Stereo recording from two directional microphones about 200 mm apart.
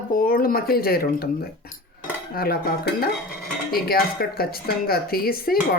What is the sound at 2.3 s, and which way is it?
Speech, 50° left (ahead or behind).